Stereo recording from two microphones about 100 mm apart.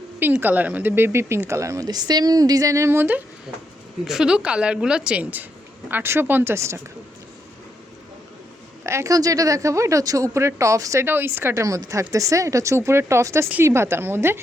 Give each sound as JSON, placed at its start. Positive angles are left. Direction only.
{"t": 0.2, "sound": "speech", "side_deg": -20}
{"t": 4.0, "sound": "a woman's voice", "side_deg": -5}
{"t": 8.8, "sound": "speech", "side_deg": -30}
{"t": 11.0, "sound": "speech", "side_deg": -20}